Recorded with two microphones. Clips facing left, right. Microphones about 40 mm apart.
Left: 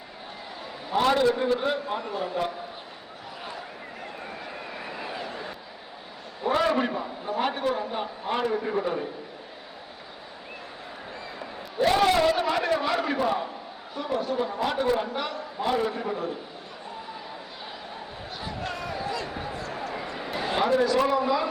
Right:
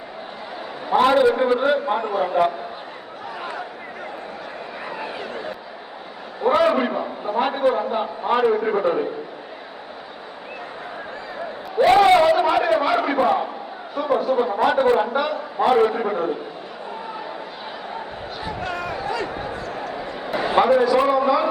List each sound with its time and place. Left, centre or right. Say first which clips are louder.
0.9 s a man's voice: right 6 dB; right
5.1 s a sound: right 4 dB; right
6.4 s a man's voice: right 6 dB; right
8.6 s a man's voice: right 7 dB; right
11.8 s a man's voice: right 7 dB; right
14.8 s a man's voice: right 6 dB; right
15.1 s a man's voice: right 9 dB; centre
15.6 s a man's voice: right 9 dB; right
18.7 s a sound: right 5 dB; right
20.3 s a man's voice: right 7 dB; right